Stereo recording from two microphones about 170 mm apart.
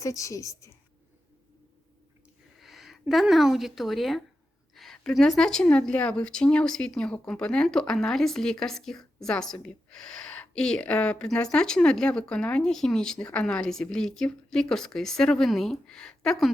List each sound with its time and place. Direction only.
0.0 s a woman's voice: 20° left (ahead or behind)
2.6 s speech: centre (ahead or behind)
4.7 s a sound: centre (ahead or behind)
5.4 s speech: 5° left (ahead or behind)